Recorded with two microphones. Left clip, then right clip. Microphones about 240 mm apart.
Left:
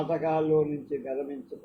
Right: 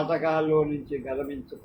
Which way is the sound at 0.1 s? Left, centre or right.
Right.